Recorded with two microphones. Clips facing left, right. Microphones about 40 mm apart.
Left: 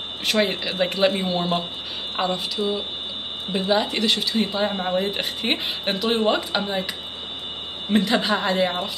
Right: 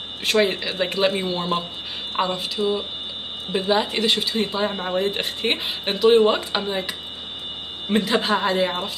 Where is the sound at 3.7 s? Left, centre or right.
Centre.